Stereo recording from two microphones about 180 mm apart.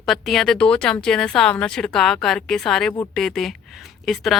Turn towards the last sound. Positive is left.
turn(degrees=0)  # may be behind; listen again after turning